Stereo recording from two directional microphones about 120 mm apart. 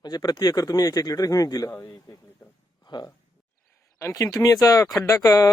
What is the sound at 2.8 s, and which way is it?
Speech, 35° left (ahead or behind).